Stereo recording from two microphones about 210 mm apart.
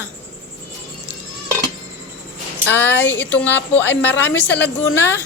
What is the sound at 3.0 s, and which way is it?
Music, 55° left (ahead or behind).